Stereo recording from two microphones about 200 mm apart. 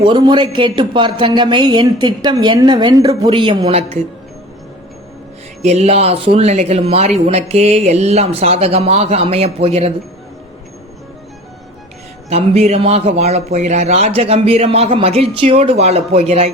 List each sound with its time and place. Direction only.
0.0 s a woman's voice: 25° right (ahead or behind)
5.6 s speech: 30° right (ahead or behind)
12.3 s speech: 30° right (ahead or behind)